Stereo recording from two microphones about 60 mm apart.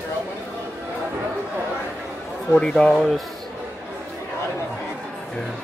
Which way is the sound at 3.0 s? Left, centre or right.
Centre.